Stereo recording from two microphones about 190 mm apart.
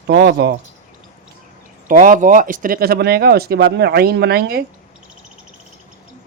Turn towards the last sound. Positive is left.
turn(degrees=-55)  # may be behind; listen again after turning